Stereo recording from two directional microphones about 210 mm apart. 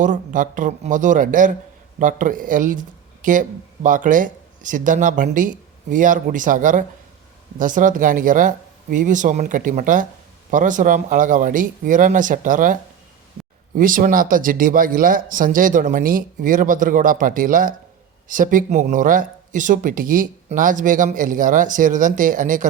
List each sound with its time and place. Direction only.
0.0 s speech: 40° right (ahead or behind)
13.7 s speech: 40° right (ahead or behind)